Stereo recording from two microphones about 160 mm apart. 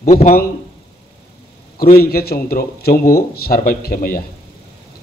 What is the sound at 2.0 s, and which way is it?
Speech, 75° left (ahead or behind).